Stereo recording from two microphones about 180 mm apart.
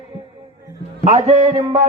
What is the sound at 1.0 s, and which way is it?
Speech, 35° right (ahead or behind).